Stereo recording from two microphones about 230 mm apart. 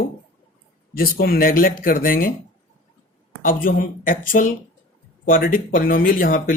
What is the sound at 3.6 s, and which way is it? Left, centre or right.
Speech, left.